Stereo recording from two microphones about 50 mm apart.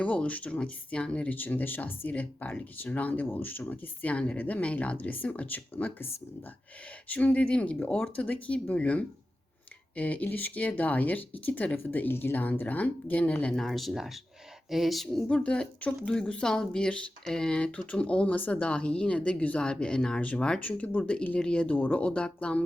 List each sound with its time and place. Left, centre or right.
0.0 s speech: left
1.3 s speech: left
2.1 s speech: left
7.1 s speech: left
13.5 s speech: centre
15.3 s speech: left